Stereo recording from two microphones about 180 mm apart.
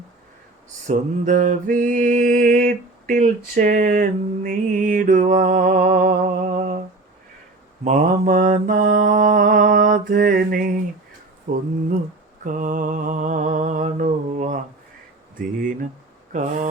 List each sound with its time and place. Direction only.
0.9 s mantra: 45° right (ahead or behind)
7.9 s mantra: 45° right (ahead or behind)
12.5 s a sound: 45° right (ahead or behind)
16.3 s mantra: 45° right (ahead or behind)